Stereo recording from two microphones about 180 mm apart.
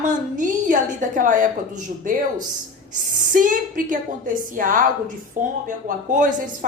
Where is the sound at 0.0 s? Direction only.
45° right (ahead or behind).